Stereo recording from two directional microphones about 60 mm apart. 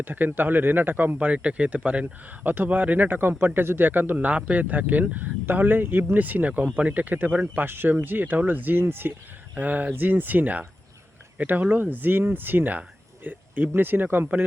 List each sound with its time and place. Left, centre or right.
0.0 s speech: right
1.3 s speech: right
9.6 s speech: right